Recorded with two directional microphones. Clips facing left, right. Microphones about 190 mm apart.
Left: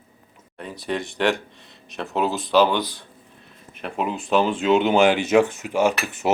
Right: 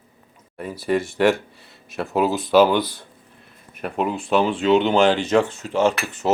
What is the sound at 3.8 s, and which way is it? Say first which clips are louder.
Speech: right 2 dB; centre (ahead or behind).